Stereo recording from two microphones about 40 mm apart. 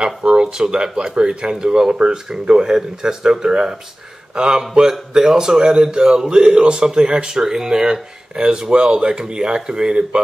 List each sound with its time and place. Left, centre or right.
0.0 s a man's voice: right